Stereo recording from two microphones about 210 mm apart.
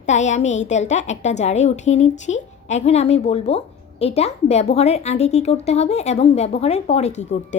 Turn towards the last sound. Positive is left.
turn(degrees=35)  # may be behind; listen again after turning